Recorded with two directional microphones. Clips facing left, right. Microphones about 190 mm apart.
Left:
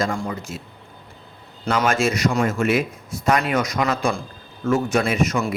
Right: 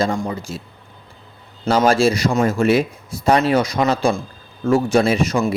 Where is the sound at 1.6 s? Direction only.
30° right (ahead or behind).